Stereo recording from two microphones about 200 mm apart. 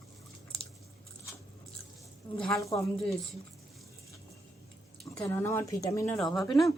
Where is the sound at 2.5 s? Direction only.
15° left (ahead or behind).